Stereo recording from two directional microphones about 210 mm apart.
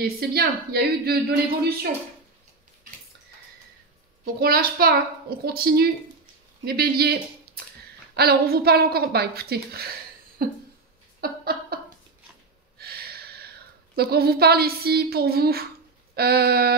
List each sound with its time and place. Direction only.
0.2 s a woman's voice: 50° right (ahead or behind)
4.2 s a woman's voice: 45° right (ahead or behind)
11.1 s a sound: 45° right (ahead or behind)
13.9 s a woman's voice: 50° right (ahead or behind)